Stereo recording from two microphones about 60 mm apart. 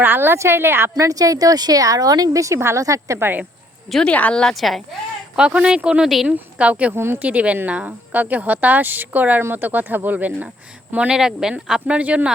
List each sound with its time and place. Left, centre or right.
0.0 s speech: right
0.9 s speech: right
2.6 s speech: right
2.8 s a woman's voice: right
3.2 s speech: right
4.0 s speech: left
4.5 s a woman's voice: centre
5.6 s speech: centre
6.9 s speech: right
7.2 s speech: right
11.1 s speech: centre